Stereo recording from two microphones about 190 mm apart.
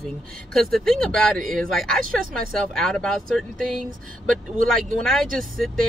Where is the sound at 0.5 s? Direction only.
Centre (ahead or behind).